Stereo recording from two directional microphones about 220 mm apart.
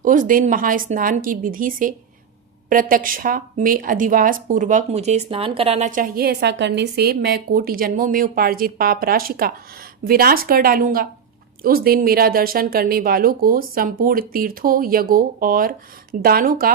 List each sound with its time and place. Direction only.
0.0 s speech: 35° right (ahead or behind)